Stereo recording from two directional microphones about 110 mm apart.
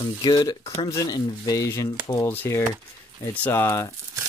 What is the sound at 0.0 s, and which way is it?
Speech, 45° left (ahead or behind).